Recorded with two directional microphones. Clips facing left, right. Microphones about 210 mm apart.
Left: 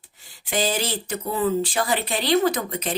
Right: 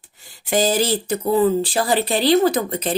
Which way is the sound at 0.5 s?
40° right (ahead or behind).